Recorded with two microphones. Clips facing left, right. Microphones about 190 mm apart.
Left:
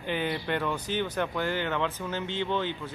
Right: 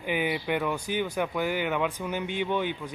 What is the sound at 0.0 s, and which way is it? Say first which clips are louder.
Speech: right 2 dB; 10° right (ahead or behind).